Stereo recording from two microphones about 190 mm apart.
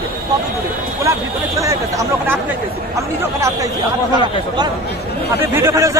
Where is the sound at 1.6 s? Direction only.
15° right (ahead or behind).